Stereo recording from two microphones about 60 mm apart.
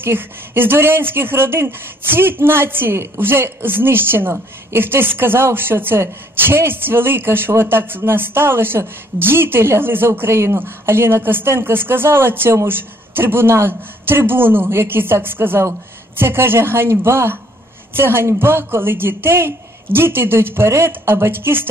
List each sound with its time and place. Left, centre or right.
0.0 s a woman's voice: right